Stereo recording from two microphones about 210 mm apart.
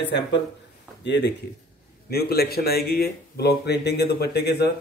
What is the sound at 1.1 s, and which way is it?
Speech, 55° left (ahead or behind).